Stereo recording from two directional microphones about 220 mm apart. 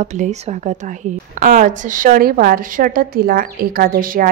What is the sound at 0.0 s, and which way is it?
A woman's voice, 35° right (ahead or behind).